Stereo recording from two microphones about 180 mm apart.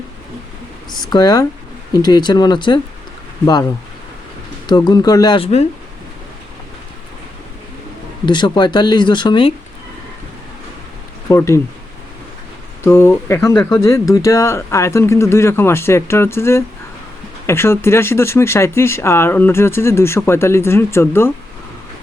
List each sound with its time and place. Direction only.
0.9 s speech: 25° left (ahead or behind)
8.3 s speech: 25° left (ahead or behind)
11.3 s speech: 15° left (ahead or behind)
12.8 s speech: 15° left (ahead or behind)